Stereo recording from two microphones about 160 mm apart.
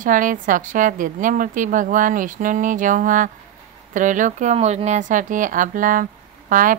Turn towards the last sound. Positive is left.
turn(degrees=-55)  # may be behind; listen again after turning